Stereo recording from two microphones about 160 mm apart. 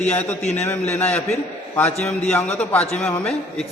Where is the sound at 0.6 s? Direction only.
10° left (ahead or behind).